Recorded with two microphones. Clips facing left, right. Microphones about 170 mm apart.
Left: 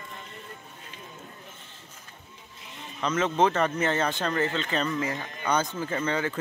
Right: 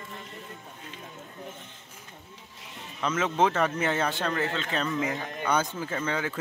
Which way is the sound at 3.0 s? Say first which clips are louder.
Left 1 dB; 5° right (ahead or behind).